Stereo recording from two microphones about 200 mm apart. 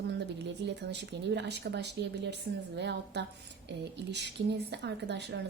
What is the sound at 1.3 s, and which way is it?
A woman's voice, 60° right (ahead or behind).